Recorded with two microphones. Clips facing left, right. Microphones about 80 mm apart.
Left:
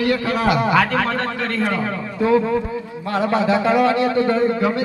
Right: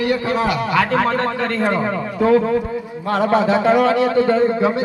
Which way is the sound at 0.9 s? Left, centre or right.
Centre.